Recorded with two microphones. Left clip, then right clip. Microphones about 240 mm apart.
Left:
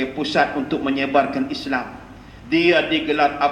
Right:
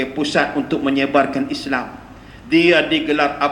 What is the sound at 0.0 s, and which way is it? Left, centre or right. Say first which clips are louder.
A man's voice: right 1 dB; right.